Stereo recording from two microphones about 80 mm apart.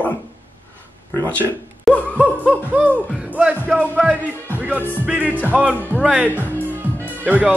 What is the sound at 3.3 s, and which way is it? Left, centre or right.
Speech, centre.